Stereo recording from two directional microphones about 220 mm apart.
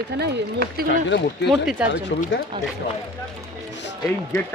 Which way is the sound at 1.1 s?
55° left (ahead or behind).